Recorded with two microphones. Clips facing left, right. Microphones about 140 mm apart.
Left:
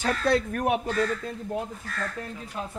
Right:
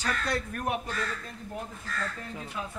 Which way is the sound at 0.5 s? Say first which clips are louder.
Left 6 dB; 80° left.